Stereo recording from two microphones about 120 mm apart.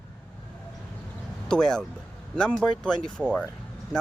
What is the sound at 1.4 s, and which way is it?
Speech, 5° left (ahead or behind).